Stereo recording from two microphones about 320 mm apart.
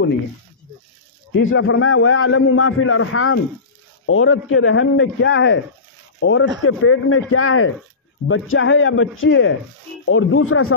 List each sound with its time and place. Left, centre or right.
1.3 s a man's voice: left